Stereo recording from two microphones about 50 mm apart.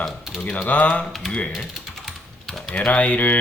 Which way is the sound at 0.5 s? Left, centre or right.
Left.